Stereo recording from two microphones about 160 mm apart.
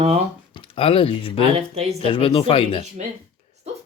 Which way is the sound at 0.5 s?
35° left (ahead or behind).